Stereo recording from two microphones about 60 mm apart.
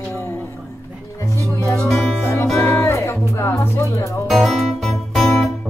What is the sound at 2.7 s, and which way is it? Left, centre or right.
Music, left.